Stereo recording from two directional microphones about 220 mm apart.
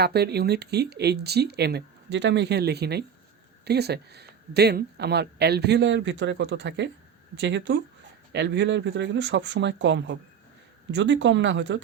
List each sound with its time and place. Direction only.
0.0 s speech: 50° right (ahead or behind)